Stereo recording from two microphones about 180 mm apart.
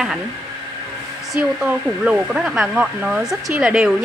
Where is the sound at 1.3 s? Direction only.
5° right (ahead or behind).